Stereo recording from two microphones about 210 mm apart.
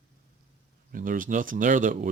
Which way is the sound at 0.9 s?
40° right (ahead or behind).